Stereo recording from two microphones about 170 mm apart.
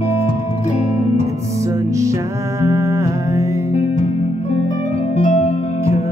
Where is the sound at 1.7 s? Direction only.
20° right (ahead or behind).